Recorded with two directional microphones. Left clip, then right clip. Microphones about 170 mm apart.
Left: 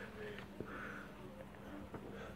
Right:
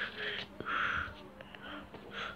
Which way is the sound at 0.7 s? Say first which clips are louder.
Right 17 dB; centre (ahead or behind).